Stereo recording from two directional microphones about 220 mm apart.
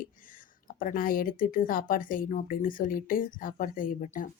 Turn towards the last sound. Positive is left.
turn(degrees=35)  # may be behind; listen again after turning